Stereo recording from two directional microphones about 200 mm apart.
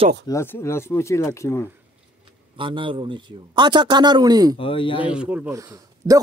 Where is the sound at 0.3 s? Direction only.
15° left (ahead or behind).